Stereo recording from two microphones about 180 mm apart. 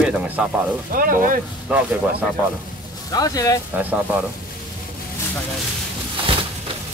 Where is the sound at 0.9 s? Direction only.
50° right (ahead or behind).